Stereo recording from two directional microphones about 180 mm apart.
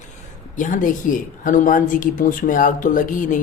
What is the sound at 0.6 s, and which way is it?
A woman's voice, 45° left (ahead or behind).